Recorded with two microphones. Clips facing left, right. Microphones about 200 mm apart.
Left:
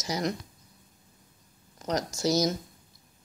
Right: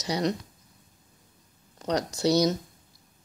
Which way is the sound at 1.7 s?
35° right (ahead or behind).